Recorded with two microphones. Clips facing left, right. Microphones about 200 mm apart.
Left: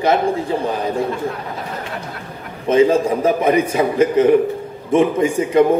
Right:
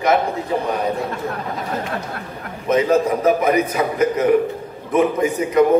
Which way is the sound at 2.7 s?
30° left (ahead or behind).